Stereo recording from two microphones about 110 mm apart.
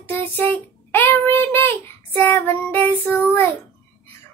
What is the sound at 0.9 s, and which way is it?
Child singing, 15° left (ahead or behind).